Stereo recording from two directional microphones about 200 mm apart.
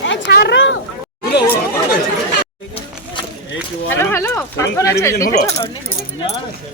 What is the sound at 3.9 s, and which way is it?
Speech, 10° left (ahead or behind).